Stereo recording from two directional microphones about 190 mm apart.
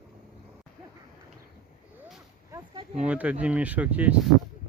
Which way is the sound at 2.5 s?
25° right (ahead or behind).